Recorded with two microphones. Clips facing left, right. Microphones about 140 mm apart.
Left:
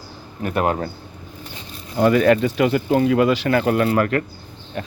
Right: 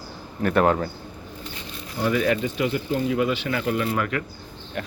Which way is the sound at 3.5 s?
60° left (ahead or behind).